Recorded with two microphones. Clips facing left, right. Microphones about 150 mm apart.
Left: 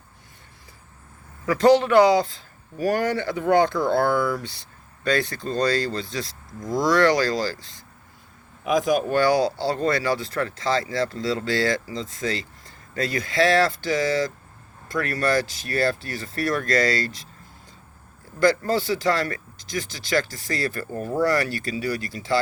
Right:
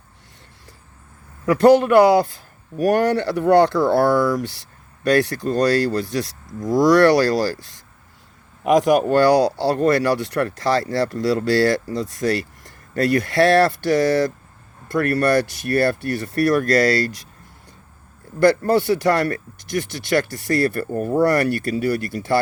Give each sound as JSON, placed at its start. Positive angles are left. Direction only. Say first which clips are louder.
{"t": 1.5, "sound": "speech", "louder": "right 4 dB", "side_deg": -55}
{"t": 2.7, "sound": "speech", "louder": "right 5 dB", "side_deg": -70}
{"t": 8.6, "sound": "speech", "louder": "right 6 dB", "side_deg": -65}
{"t": 12.6, "sound": "speech", "louder": "right 8 dB", "side_deg": -65}
{"t": 18.3, "sound": "speech", "louder": "right 5 dB", "side_deg": -55}